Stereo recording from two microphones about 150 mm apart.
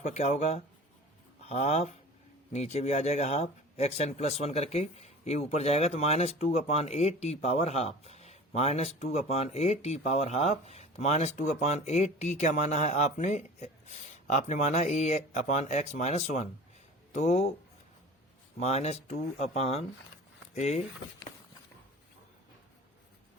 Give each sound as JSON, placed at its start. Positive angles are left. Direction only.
{"t": 0.0, "sound": "a man's voice", "side_deg": 50}
{"t": 18.6, "sound": "a man's voice", "side_deg": 50}